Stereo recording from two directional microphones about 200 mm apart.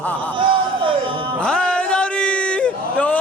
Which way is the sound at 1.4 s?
5° left (ahead or behind).